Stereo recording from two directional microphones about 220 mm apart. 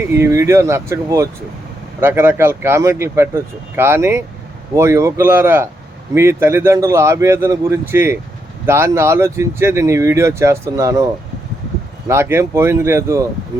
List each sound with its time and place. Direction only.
0.2 s speech: 15° right (ahead or behind)
12.0 s speech: 10° right (ahead or behind)